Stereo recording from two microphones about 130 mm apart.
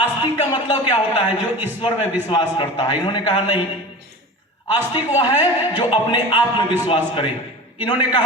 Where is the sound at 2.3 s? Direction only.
40° left (ahead or behind).